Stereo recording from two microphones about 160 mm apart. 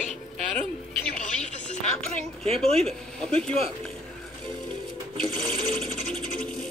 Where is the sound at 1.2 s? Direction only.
45° left (ahead or behind).